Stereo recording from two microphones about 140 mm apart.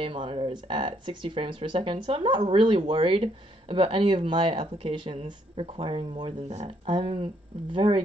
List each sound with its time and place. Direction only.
0.0 s speech: 35° right (ahead or behind)